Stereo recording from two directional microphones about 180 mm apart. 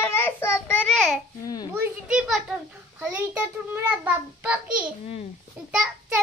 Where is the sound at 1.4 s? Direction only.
20° left (ahead or behind).